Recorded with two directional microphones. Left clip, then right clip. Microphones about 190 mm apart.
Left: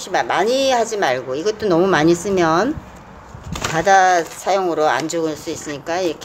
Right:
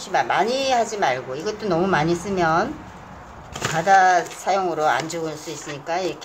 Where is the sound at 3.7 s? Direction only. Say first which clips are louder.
Left 2 dB; 35° left (ahead or behind).